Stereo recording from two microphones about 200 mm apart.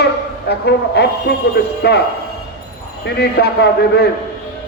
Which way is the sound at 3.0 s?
55° left (ahead or behind).